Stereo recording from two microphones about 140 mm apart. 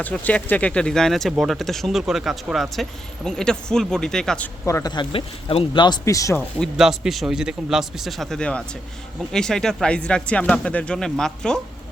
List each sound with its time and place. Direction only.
0.0 s speech: 10° left (ahead or behind)
4.6 s speech: 25° left (ahead or behind)
6.7 s speech: 5° right (ahead or behind)